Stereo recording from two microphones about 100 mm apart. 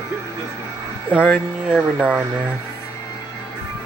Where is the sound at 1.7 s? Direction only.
10° right (ahead or behind).